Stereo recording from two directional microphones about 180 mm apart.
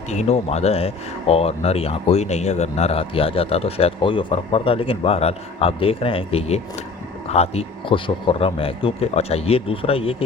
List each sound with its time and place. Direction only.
0.1 s speech: 35° left (ahead or behind)